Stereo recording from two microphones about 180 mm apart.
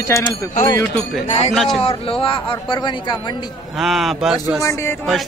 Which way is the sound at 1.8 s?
30° left (ahead or behind).